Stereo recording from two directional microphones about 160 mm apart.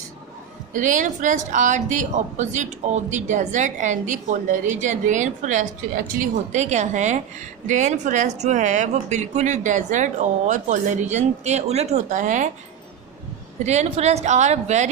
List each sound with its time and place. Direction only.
0.7 s a woman's voice: 50° right (ahead or behind)
13.7 s a woman's voice: 45° right (ahead or behind)